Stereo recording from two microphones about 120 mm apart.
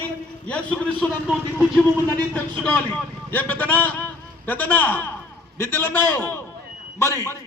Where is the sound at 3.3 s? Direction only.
15° left (ahead or behind).